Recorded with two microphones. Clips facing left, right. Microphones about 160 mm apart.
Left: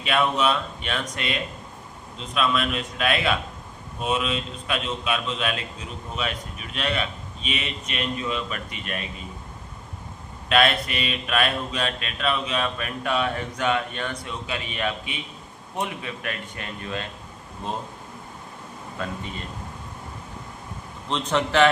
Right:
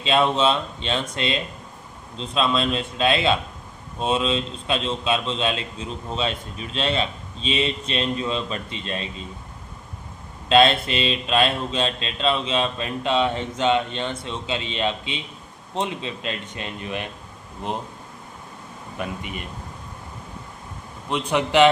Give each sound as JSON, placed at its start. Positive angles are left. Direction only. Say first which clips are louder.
{"t": 0.0, "sound": "a man's voice", "louder": "right 3 dB", "side_deg": -25}
{"t": 10.5, "sound": "a man's voice", "louder": "right 4 dB", "side_deg": -25}
{"t": 18.9, "sound": "a man's voice", "louder": "right 2 dB", "side_deg": -15}
{"t": 21.1, "sound": "a man's voice", "louder": "right 2 dB", "side_deg": -15}